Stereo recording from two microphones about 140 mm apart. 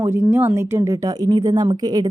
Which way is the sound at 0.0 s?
20° right (ahead or behind).